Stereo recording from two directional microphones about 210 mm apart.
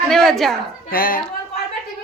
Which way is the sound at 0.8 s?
45° left (ahead or behind).